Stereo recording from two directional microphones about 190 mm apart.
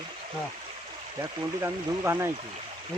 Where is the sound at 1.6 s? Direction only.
15° right (ahead or behind).